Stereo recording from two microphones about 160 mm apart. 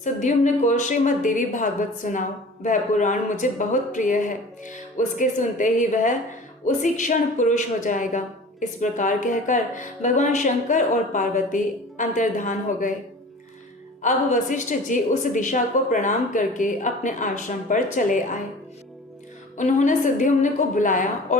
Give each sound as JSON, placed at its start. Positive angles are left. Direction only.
{"t": 0.0, "sound": "a woman's voice", "side_deg": 50}
{"t": 14.0, "sound": "a woman's voice", "side_deg": 50}
{"t": 19.5, "sound": "a woman's voice", "side_deg": 50}